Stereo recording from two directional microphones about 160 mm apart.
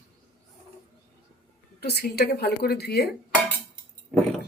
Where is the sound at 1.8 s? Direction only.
85° left.